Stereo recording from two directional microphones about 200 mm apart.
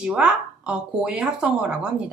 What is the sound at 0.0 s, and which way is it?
Speech, 5° right (ahead or behind).